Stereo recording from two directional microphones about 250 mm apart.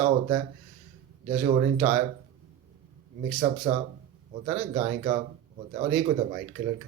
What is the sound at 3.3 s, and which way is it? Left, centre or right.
Speech, right.